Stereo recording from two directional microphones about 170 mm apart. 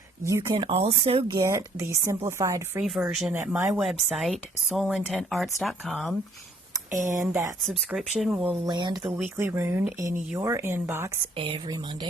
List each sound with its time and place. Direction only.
0.3 s speech: 20° right (ahead or behind)
0.5 s speech: 35° right (ahead or behind)
1.4 s speech: 15° right (ahead or behind)
2.8 s speech: centre (ahead or behind)
7.1 s speech: 20° right (ahead or behind)
7.7 s speech: 5° right (ahead or behind)
8.6 s speech: 25° right (ahead or behind)
11.3 s speech: 30° right (ahead or behind)